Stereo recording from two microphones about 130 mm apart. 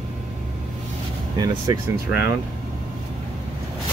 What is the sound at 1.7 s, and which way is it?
Speech, 30° right (ahead or behind).